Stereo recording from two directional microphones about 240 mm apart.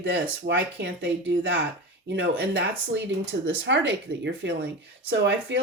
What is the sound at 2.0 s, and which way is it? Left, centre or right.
Speech, right.